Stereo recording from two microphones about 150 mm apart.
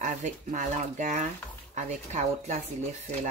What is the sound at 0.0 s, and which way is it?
Speech, 55° right (ahead or behind).